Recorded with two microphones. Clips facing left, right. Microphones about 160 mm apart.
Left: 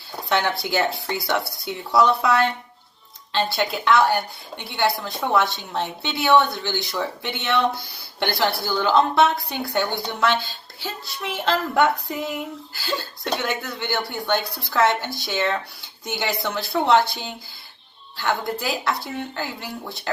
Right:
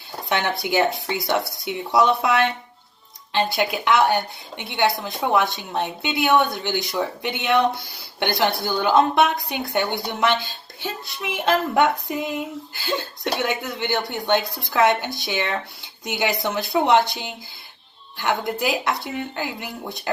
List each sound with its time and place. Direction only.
0.3 s a woman's voice: 20° right (ahead or behind)